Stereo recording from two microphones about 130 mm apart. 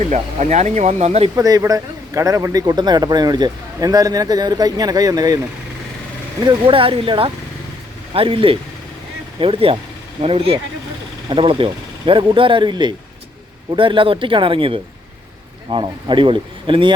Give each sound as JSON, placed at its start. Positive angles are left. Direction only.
{"t": 0.0, "sound": "speech", "side_deg": -60}
{"t": 1.4, "sound": "speech", "side_deg": -30}
{"t": 6.4, "sound": "speech", "side_deg": -40}